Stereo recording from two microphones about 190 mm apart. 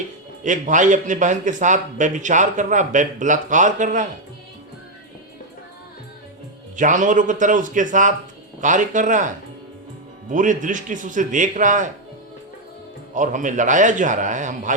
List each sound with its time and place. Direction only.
0.4 s a man's voice: 40° right (ahead or behind)
6.7 s a man's voice: 40° right (ahead or behind)
13.1 s a man's voice: 40° right (ahead or behind)